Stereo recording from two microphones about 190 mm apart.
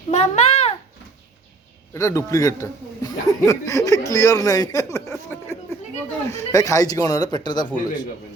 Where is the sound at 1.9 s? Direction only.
15° left (ahead or behind).